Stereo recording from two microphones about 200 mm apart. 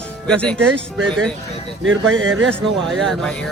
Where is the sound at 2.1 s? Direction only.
80° right.